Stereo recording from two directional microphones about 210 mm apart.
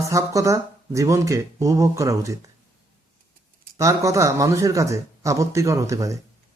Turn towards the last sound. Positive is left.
turn(degrees=-15)  # may be behind; listen again after turning